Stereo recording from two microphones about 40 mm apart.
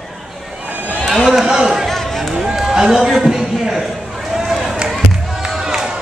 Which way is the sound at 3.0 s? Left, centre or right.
Centre.